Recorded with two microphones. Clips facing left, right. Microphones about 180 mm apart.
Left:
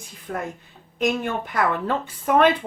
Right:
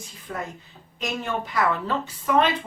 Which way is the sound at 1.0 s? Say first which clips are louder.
Left 5 dB; 55° left (ahead or behind).